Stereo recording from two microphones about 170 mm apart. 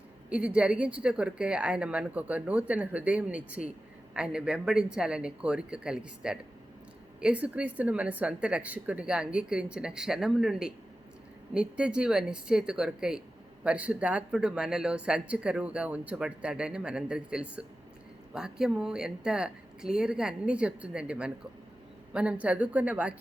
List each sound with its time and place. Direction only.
0.3 s a woman's voice: 10° right (ahead or behind)